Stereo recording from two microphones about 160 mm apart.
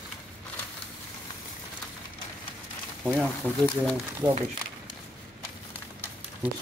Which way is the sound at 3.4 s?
10° left (ahead or behind).